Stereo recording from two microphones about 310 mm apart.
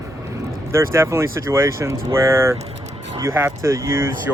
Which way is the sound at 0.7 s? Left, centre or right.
Centre.